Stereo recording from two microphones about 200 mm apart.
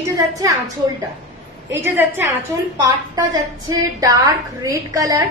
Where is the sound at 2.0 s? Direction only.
10° right (ahead or behind).